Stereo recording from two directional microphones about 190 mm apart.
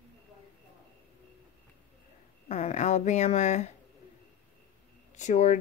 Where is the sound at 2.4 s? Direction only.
35° left (ahead or behind).